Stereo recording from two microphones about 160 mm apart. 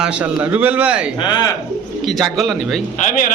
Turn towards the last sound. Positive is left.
turn(degrees=55)  # may be behind; listen again after turning